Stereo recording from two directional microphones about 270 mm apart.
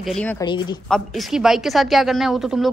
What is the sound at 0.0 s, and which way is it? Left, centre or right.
Speech, centre.